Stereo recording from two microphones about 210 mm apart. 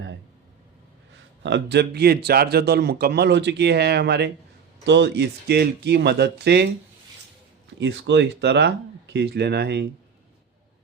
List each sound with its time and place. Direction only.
1.5 s a man's voice: 55° right (ahead or behind)
7.8 s a man's voice: 55° right (ahead or behind)